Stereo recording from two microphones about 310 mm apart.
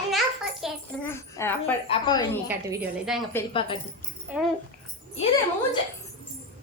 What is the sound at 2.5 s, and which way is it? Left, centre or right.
Speech, centre.